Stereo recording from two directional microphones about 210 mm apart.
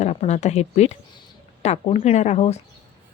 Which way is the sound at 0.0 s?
35° left (ahead or behind).